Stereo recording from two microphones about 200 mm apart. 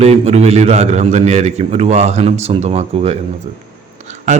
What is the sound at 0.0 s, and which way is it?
A man's voice, 30° right (ahead or behind).